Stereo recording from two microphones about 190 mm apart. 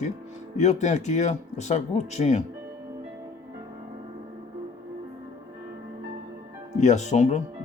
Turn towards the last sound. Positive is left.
turn(degrees=40)  # may be behind; listen again after turning